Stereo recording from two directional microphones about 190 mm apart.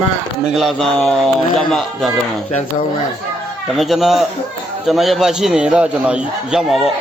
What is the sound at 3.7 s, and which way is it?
A man's voice, centre (ahead or behind).